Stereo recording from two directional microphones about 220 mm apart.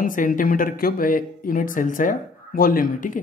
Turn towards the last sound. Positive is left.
turn(degrees=40)  # may be behind; listen again after turning